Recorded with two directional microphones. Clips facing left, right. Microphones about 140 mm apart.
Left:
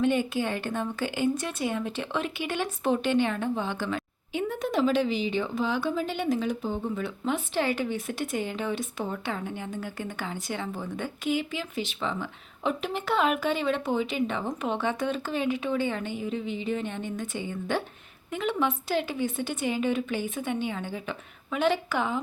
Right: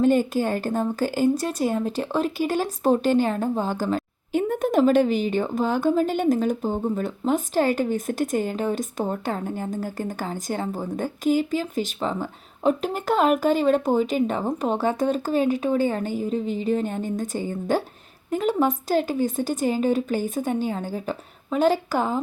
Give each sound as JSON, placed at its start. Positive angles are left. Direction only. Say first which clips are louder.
{"t": 0.0, "sound": "a woman's voice", "louder": "right 6 dB", "side_deg": -40}